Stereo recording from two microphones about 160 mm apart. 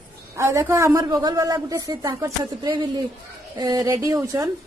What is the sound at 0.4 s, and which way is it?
A woman's voice, 15° right (ahead or behind).